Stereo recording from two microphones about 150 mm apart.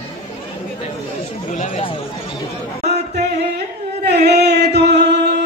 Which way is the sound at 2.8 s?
45° right (ahead or behind).